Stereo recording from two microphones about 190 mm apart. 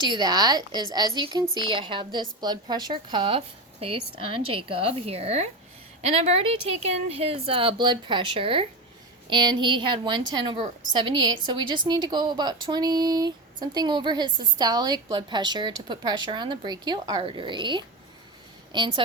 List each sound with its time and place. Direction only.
0.0 s a woman's voice: 20° right (ahead or behind)